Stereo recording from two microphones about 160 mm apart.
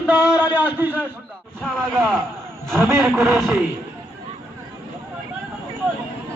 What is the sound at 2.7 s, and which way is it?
Speech, 15° right (ahead or behind).